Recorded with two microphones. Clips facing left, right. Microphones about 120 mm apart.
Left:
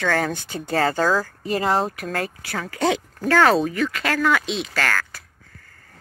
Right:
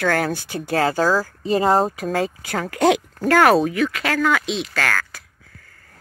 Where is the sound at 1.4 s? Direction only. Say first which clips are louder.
Right 5 dB; 30° right (ahead or behind).